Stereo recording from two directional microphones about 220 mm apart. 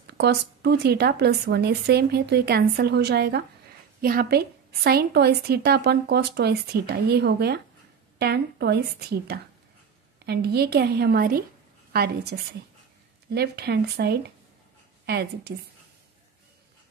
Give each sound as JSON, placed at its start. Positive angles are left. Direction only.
{"t": 0.0, "sound": "a woman's voice", "side_deg": -50}